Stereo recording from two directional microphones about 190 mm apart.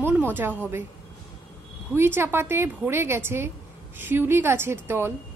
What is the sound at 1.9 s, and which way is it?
A woman's voice, 10° right (ahead or behind).